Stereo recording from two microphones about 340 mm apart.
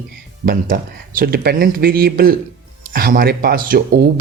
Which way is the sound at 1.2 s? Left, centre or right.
Right.